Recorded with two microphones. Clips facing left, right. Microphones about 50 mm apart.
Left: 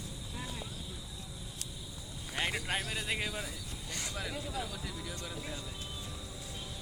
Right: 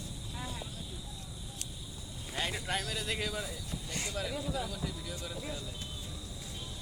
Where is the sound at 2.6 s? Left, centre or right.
Left.